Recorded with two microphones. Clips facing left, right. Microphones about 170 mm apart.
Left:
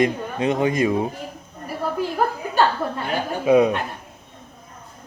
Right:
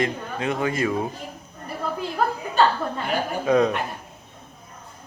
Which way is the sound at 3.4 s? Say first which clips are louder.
Left 4 dB; 10° left (ahead or behind).